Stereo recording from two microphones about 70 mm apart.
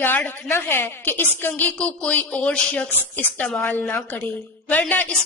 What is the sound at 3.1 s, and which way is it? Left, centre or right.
A woman's voice, left.